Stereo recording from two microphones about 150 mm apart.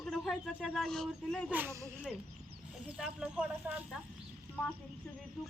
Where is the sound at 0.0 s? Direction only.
Centre (ahead or behind).